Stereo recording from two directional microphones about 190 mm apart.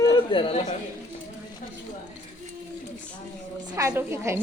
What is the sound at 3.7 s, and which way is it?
Speech, 15° right (ahead or behind).